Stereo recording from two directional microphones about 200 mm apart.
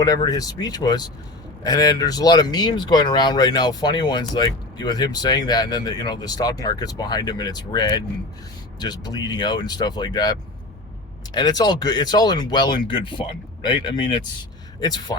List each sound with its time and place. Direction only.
0.0 s speech: 20° left (ahead or behind)
11.3 s speech: 20° left (ahead or behind)